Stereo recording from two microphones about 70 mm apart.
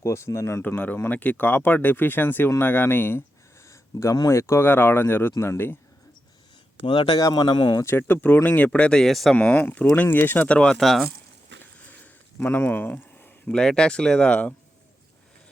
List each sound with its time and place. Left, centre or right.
0.0 s speech: left
1.1 s speech: left
3.7 s a sound: left
4.3 s speech: left
6.9 s speech: left
7.9 s speech: left; by 9.3 s centre
9.3 s speech: left
10.8 s speech: centre
12.4 s speech: left
13.5 s speech: centre